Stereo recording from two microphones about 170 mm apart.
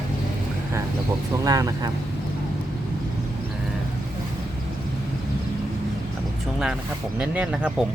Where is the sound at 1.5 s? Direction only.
20° right (ahead or behind).